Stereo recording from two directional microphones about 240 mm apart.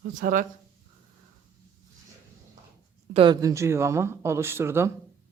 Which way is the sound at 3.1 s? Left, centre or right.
Right.